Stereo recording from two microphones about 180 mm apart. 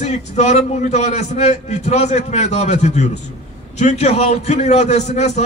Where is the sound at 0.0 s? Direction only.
40° left (ahead or behind).